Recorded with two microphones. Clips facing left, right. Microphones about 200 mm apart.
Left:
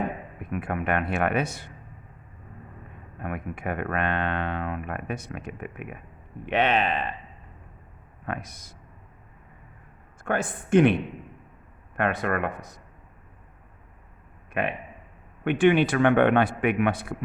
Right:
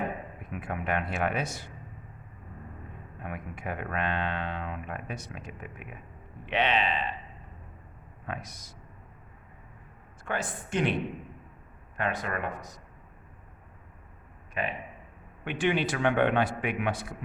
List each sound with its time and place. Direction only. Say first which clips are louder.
0.4 s speech: left 6 dB; 60° left (ahead or behind)
3.2 s speech: left 6 dB; 55° left (ahead or behind)
8.3 s speech: left 5 dB; 55° left (ahead or behind)
10.2 s speech: left 6 dB; 50° left (ahead or behind)
11.9 s speech: left 6 dB; 60° left (ahead or behind)
14.5 s speech: left 5 dB; 60° left (ahead or behind)